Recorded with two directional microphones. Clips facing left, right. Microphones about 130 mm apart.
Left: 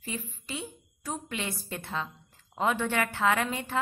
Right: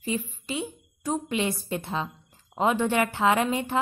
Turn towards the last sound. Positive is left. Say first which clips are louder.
# right 4 dB
turn(degrees=-20)  # may be behind; listen again after turning